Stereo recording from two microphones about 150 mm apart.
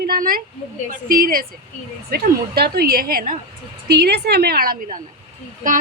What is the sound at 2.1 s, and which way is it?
A woman's voice, 90° right.